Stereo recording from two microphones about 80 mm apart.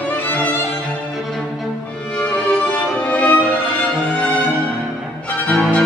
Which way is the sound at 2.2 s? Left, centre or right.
Centre.